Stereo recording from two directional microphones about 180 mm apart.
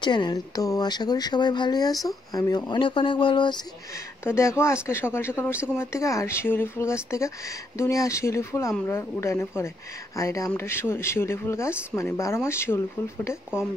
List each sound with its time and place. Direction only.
0.0 s speech: 25° left (ahead or behind)